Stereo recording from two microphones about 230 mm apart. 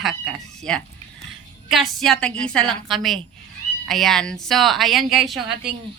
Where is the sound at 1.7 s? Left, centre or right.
Centre.